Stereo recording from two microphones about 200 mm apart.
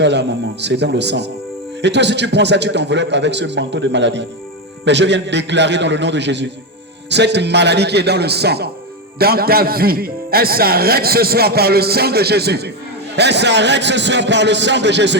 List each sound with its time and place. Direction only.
0.0 s a man's voice: 60° right (ahead or behind)